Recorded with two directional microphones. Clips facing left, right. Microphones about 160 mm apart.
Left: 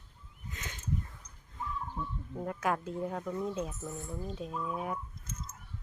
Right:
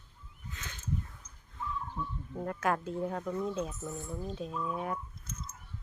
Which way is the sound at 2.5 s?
5° left (ahead or behind).